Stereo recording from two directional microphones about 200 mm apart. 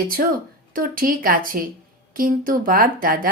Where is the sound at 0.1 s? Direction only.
45° right (ahead or behind).